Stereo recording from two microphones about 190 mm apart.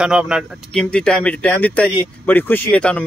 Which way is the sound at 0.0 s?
5° right (ahead or behind).